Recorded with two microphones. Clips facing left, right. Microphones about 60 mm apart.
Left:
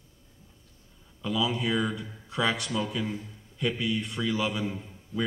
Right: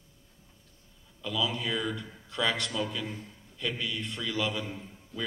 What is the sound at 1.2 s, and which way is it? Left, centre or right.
A man's voice, left.